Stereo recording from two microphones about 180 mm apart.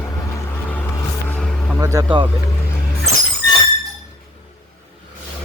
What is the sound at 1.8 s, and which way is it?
Speech, 20° right (ahead or behind).